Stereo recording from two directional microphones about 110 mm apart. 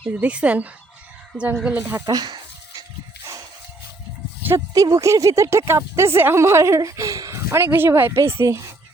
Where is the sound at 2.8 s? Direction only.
30° right (ahead or behind).